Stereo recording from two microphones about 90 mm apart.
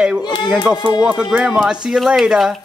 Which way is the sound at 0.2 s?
55° left (ahead or behind).